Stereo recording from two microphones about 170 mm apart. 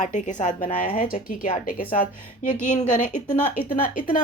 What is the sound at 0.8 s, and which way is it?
A woman's voice, 55° left (ahead or behind).